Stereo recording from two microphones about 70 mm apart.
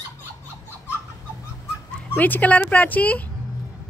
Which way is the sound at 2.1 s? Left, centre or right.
Left.